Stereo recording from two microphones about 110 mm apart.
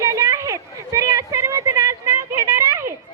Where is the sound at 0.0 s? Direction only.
30° right (ahead or behind).